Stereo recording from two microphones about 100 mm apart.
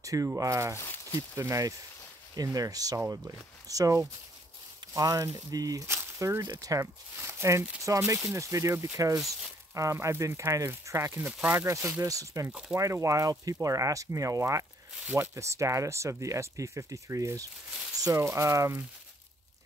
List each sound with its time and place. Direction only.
0.0 s speech: 35° right (ahead or behind)
0.7 s speech: 20° left (ahead or behind)
1.3 s speech: 30° right (ahead or behind)
6.4 s speech: 40° right (ahead or behind); by 11.3 s 25° right (ahead or behind)
11.3 s speech: 15° right (ahead or behind)
11.6 s speech: 30° right (ahead or behind)